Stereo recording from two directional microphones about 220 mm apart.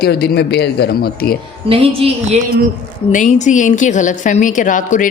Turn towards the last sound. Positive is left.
turn(degrees=35)  # may be behind; listen again after turning